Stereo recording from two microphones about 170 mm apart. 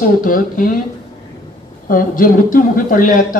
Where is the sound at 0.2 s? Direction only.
55° left (ahead or behind).